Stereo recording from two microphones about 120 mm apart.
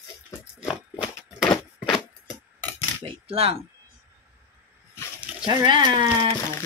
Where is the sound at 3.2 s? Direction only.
55° right (ahead or behind).